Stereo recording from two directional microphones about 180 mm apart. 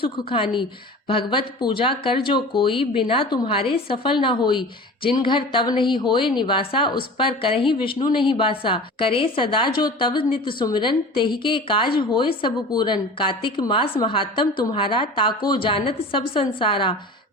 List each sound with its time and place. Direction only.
0.0 s a woman's voice: 30° left (ahead or behind)